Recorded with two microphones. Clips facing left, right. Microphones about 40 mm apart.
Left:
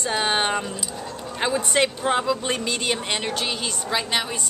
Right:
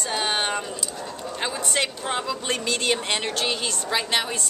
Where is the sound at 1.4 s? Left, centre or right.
Centre.